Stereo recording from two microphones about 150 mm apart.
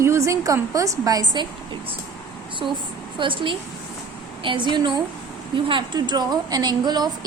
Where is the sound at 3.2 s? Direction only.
35° right (ahead or behind).